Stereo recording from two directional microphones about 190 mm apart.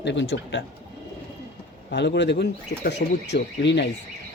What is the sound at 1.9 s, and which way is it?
Speech, 65° left (ahead or behind).